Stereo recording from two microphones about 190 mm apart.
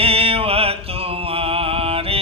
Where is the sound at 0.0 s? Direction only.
30° right (ahead or behind).